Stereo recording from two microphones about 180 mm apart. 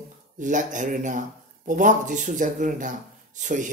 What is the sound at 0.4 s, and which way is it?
Speech, 45° right (ahead or behind).